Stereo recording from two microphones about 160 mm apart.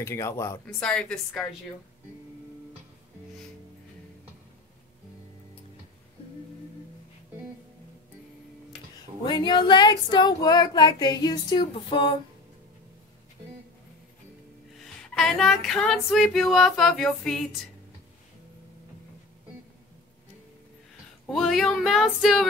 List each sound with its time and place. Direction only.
0.0 s speech: 15° left (ahead or behind)
0.7 s female singing: 5° left (ahead or behind)
9.2 s speech: 25° left (ahead or behind)
15.1 s female singing: 5° left (ahead or behind)
21.3 s female singing: centre (ahead or behind)